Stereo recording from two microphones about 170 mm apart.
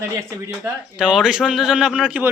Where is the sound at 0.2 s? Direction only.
15° right (ahead or behind).